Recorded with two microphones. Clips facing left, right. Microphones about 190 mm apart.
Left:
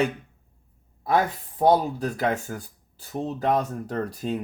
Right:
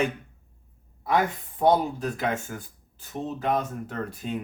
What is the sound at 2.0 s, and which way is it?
Speech, 35° left (ahead or behind).